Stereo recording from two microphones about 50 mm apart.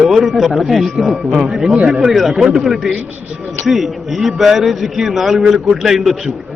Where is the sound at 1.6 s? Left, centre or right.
Centre.